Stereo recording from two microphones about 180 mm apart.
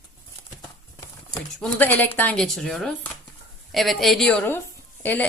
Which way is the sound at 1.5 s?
5° left (ahead or behind).